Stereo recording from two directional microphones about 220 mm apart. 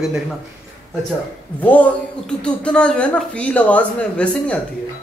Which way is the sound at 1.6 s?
5° left (ahead or behind).